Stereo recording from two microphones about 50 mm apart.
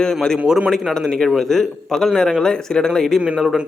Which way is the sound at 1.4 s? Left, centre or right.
Centre.